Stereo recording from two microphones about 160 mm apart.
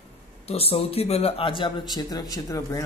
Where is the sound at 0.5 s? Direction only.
40° left (ahead or behind).